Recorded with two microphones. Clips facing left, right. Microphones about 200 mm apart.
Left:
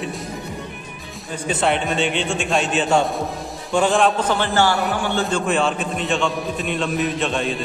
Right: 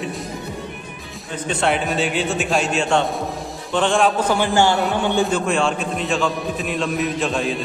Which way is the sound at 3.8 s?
Centre (ahead or behind).